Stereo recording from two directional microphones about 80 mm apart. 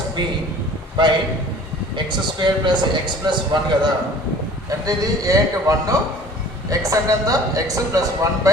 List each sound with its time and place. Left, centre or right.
1.0 s a man's voice: right
4.9 s speech: right